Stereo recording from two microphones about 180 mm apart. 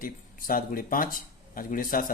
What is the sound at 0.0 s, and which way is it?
Speech, 50° left (ahead or behind).